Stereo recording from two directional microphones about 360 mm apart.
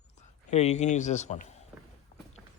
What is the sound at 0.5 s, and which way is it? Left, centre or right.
Speech, centre.